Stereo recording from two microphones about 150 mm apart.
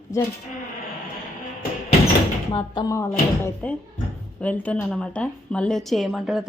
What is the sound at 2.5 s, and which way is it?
A woman's voice, 30° left (ahead or behind).